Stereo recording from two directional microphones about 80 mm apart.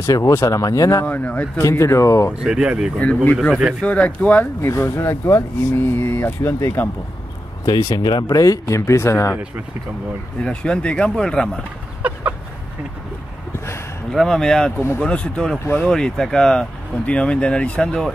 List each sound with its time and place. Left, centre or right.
0.0 s speech: left
1.0 s speech: centre
1.6 s speech: left
2.4 s speech: centre
3.0 s speech: centre
4.6 s speech: left
8.0 s speech: left
10.4 s speech: centre
12.0 s speech: centre
14.1 s speech: centre